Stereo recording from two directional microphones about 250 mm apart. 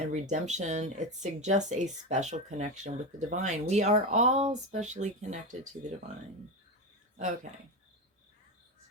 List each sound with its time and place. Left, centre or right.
0.1 s speech: right